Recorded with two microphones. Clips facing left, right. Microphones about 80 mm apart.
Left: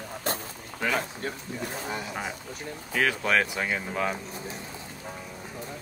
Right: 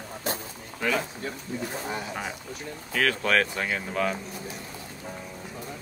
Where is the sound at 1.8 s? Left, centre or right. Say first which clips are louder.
Right 1 dB; centre.